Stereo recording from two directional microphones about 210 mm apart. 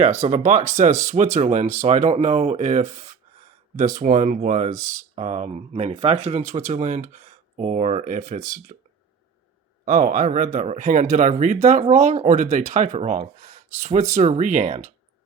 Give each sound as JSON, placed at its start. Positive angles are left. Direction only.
{"t": 0.0, "sound": "speech", "side_deg": -35}
{"t": 4.7, "sound": "speech", "side_deg": -15}
{"t": 5.1, "sound": "speech", "side_deg": -30}